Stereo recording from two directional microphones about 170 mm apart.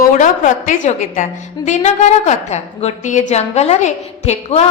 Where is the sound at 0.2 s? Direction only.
50° left (ahead or behind).